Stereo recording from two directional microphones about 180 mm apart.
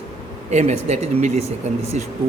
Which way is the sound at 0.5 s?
35° right (ahead or behind).